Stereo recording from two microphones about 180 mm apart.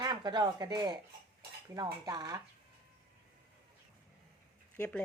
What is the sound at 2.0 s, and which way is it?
Speech, 20° right (ahead or behind).